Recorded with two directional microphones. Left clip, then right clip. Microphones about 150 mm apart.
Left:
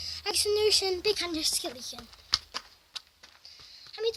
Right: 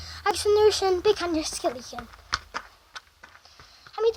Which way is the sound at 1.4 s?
30° left (ahead or behind).